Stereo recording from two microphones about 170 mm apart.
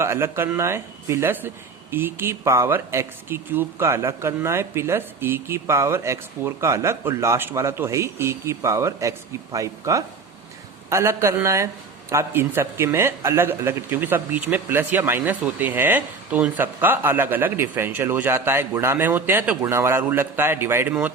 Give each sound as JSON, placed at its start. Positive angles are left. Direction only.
{"t": 0.0, "sound": "a man's voice", "side_deg": -15}